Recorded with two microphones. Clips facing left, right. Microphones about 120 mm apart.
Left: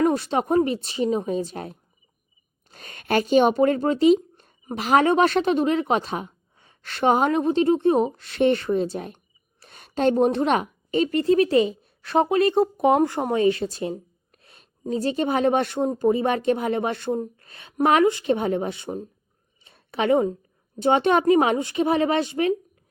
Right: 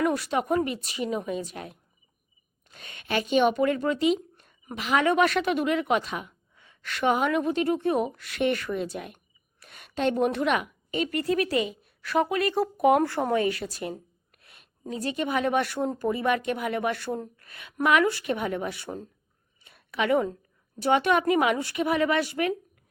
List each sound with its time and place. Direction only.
0.0 s a woman's voice: 30° left (ahead or behind)
19.6 s a sound: 30° left (ahead or behind)
20.7 s speech: 25° left (ahead or behind)